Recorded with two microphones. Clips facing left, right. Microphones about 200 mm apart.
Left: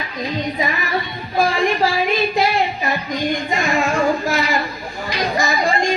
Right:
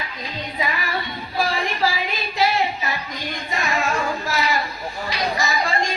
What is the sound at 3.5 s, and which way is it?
Music, 50° left (ahead or behind).